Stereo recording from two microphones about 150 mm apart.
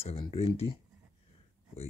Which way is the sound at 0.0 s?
35° left (ahead or behind).